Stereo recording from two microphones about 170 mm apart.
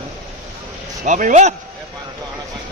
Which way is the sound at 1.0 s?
45° right (ahead or behind).